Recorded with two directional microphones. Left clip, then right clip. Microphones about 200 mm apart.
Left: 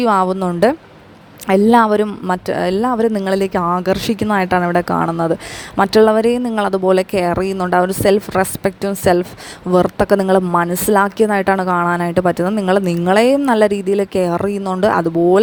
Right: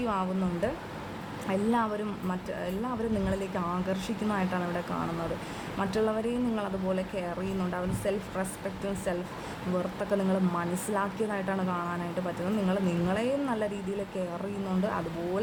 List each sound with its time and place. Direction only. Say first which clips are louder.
0.0 s a woman's voice: left 17 dB; 45° left (ahead or behind)